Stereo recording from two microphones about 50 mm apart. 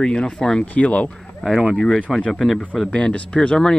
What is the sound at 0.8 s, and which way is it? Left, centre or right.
Speech, left.